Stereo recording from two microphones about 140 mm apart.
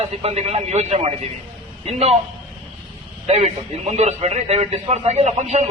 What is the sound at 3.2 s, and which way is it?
A man's voice, 55° right (ahead or behind).